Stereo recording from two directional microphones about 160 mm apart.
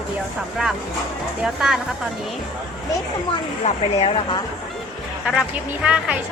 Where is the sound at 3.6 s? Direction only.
40° left (ahead or behind).